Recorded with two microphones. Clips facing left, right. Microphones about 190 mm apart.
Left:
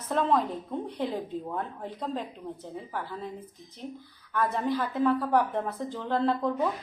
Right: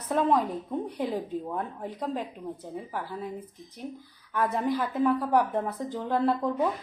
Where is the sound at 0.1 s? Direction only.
15° right (ahead or behind).